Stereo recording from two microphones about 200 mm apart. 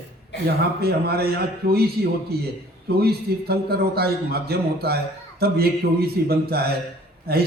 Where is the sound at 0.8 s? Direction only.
50° right (ahead or behind).